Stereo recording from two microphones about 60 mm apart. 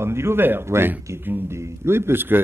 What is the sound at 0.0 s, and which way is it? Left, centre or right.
A man's voice, right.